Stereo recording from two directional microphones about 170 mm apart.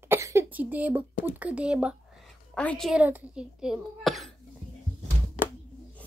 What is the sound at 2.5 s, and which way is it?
Speech, 5° left (ahead or behind).